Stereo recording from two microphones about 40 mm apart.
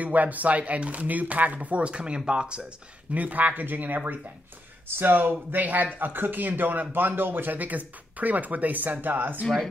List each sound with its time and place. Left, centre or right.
0.0 s speech: right
3.2 s a man's voice: right
4.8 s speech: right
5.5 s a man's voice: right